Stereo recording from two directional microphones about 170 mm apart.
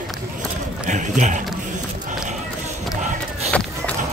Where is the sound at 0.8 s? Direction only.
45° right (ahead or behind).